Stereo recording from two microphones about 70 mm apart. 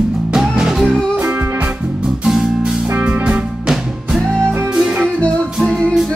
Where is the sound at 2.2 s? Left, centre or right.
Centre.